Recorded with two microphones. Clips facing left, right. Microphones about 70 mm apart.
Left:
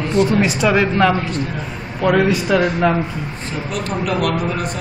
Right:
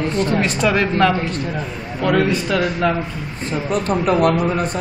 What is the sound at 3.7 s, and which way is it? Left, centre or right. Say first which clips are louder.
A man's voice: right 4 dB; right.